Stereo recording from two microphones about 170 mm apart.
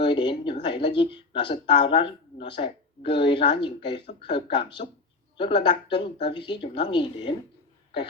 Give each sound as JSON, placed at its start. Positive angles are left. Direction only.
{"t": 0.0, "sound": "speech", "side_deg": 25}